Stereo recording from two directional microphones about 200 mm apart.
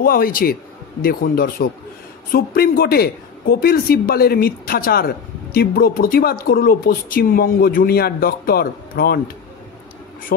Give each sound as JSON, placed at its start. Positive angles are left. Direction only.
{"t": 0.0, "sound": "a woman's voice", "side_deg": 45}